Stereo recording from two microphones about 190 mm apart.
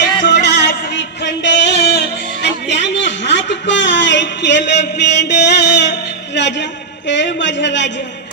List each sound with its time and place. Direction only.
0.2 s music: 65° left (ahead or behind)
7.1 s a man's voice: 70° left (ahead or behind)